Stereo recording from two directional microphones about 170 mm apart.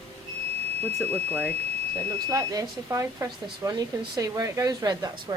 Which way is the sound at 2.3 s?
20° right (ahead or behind).